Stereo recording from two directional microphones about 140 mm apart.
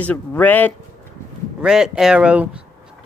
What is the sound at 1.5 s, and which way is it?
Speech, 5° right (ahead or behind).